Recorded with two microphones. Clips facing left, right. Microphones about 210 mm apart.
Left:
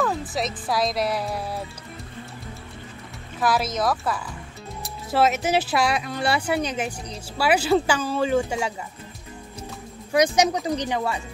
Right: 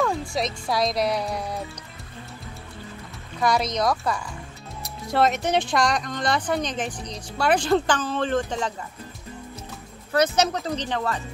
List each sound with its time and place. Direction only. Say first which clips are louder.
0.0 s speech: even; centre (ahead or behind)
3.3 s speech: even; 5° left (ahead or behind)
10.1 s speech: left 2 dB; 15° left (ahead or behind)